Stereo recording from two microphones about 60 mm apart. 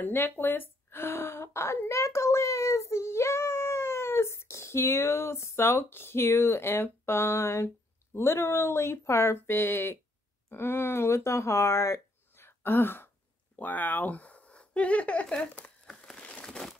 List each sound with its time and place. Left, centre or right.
0.0 s a woman's voice: left
16.2 s a sound: centre
16.4 s crumpling: centre